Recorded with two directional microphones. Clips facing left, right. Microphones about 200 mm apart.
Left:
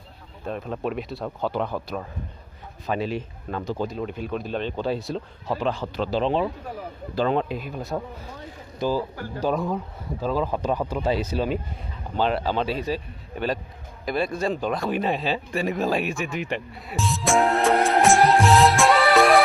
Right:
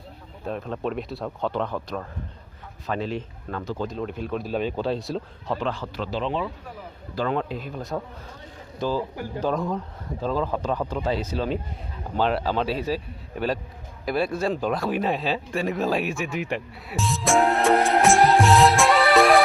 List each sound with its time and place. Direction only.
0.4 s speech: centre (ahead or behind)
5.5 s speech: 15° left (ahead or behind)
6.0 s speech: 35° left (ahead or behind)
7.2 s speech: 20° left (ahead or behind)
12.1 s speech: centre (ahead or behind)
16.8 s music: centre (ahead or behind)